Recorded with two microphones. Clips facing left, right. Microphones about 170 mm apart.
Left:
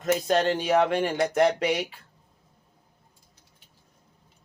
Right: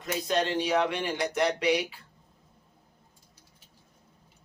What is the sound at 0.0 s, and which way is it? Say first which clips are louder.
Speech: left 5 dB; 50° left (ahead or behind).